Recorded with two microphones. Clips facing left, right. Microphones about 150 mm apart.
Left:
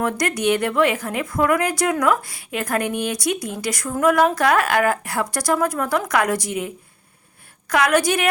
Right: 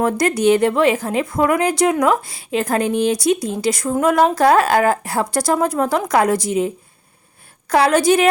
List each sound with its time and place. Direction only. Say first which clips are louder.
0.0 s a woman's voice: right 5 dB; 30° right (ahead or behind)